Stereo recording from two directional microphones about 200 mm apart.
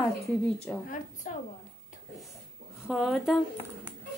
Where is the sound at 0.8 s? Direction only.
40° left (ahead or behind).